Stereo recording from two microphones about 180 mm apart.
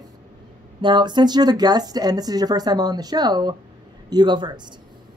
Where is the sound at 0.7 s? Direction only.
25° right (ahead or behind).